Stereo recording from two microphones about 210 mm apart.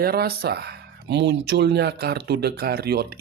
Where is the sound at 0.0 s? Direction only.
45° right (ahead or behind).